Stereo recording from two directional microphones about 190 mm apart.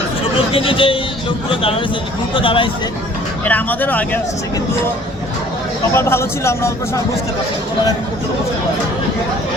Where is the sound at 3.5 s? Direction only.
10° left (ahead or behind).